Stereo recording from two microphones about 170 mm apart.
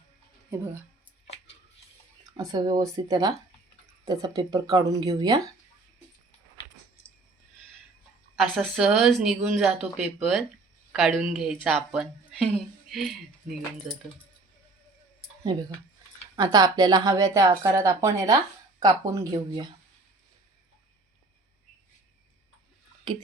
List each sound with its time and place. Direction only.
2.4 s speech: 25° right (ahead or behind)
8.4 s speech: centre (ahead or behind)
16.3 s speech: 25° right (ahead or behind)